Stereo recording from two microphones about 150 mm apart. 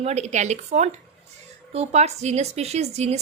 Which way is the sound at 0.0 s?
45° right (ahead or behind).